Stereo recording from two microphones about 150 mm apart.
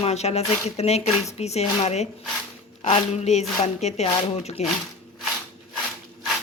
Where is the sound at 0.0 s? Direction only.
45° left (ahead or behind).